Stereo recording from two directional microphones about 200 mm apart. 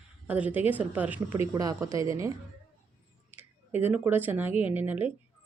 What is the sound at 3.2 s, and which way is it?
Speech, 10° right (ahead or behind).